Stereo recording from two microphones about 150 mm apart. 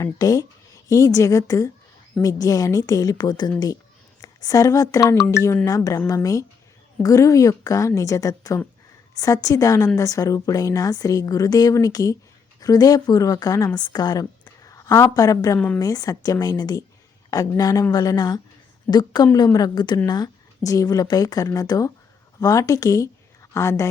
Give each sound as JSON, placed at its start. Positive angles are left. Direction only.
{"t": 0.0, "sound": "a woman's voice", "side_deg": 25}
{"t": 15.5, "sound": "a woman's voice", "side_deg": 10}
{"t": 15.8, "sound": "a woman's voice", "side_deg": 25}